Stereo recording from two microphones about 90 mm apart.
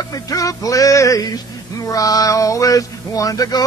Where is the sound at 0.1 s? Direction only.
40° left (ahead or behind).